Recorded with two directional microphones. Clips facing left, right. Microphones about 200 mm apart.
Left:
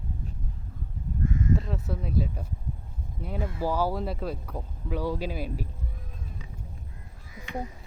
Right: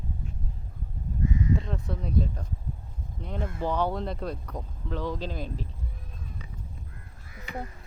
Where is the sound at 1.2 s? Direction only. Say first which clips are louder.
Even; 50° left (ahead or behind).